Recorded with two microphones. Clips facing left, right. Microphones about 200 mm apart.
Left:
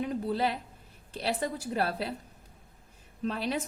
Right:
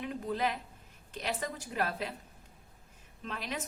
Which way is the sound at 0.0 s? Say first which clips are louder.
Left 4 dB; 35° left (ahead or behind).